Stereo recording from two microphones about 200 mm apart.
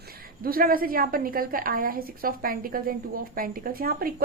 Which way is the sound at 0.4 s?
45° right (ahead or behind).